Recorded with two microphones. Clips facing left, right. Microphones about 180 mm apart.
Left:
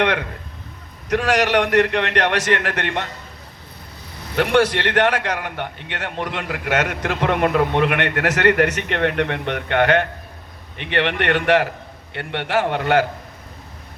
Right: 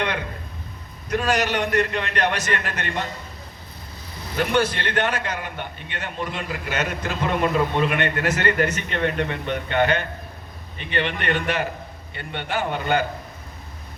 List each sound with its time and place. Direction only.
0.0 s speech: 80° left
1.1 s a man's voice: 90° left
4.4 s a man's voice: 80° left